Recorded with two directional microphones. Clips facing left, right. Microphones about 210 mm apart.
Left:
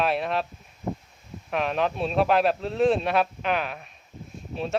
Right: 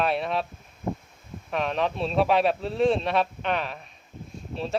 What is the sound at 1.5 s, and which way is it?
Speech, centre (ahead or behind).